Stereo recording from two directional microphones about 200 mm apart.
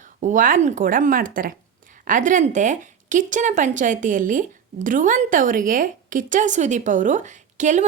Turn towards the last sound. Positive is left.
turn(degrees=-40)  # may be behind; listen again after turning